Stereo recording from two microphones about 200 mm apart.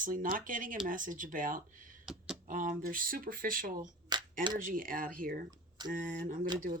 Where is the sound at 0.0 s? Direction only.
45° right (ahead or behind).